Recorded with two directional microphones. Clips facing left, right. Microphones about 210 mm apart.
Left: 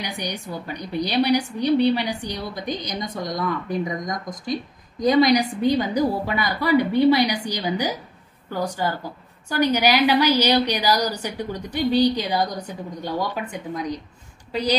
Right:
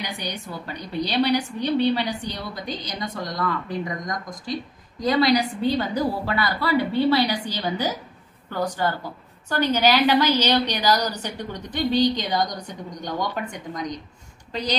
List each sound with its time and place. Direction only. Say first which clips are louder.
0.0 s a woman's voice: left 2 dB; 15° left (ahead or behind)
5.0 s a woman's voice: left 3 dB; 15° left (ahead or behind)